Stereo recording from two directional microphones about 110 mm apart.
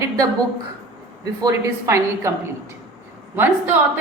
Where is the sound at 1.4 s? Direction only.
30° right (ahead or behind).